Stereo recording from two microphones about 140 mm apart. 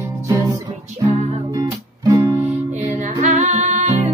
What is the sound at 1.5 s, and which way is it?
Music, 25° right (ahead or behind).